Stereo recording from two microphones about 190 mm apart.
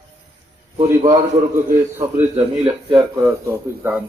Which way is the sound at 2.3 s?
30° right (ahead or behind).